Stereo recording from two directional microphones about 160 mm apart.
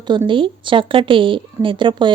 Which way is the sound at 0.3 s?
30° right (ahead or behind).